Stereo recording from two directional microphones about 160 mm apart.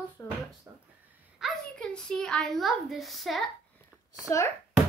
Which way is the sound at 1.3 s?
Centre (ahead or behind).